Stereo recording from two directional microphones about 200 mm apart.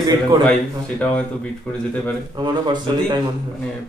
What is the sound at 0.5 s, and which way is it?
Speech, 5° left (ahead or behind).